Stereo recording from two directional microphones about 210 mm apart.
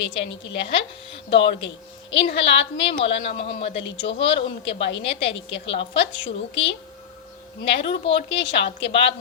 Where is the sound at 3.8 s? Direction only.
60° left (ahead or behind).